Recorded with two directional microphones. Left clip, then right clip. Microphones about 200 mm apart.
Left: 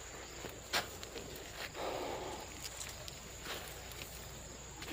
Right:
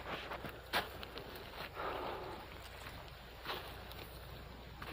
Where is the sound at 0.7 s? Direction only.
55° right (ahead or behind).